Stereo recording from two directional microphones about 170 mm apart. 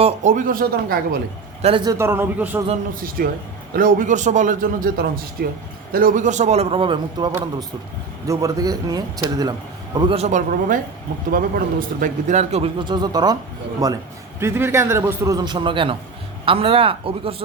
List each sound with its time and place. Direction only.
0.0 s a man's voice: 45° right (ahead or behind); by 1.2 s 60° right (ahead or behind)
1.6 s a man's voice: 25° right (ahead or behind); by 2.6 s 10° right (ahead or behind)
2.9 s a man's voice: 55° right (ahead or behind); by 7.3 s 30° right (ahead or behind)
8.3 s a man's voice: 20° right (ahead or behind)
10.2 s speech: 45° right (ahead or behind)
11.3 s a man's voice: 55° right (ahead or behind)
12.4 s a man's voice: 40° right (ahead or behind)